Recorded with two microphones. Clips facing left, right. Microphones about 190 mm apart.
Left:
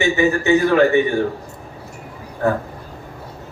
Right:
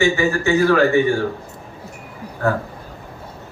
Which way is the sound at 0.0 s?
20° left (ahead or behind).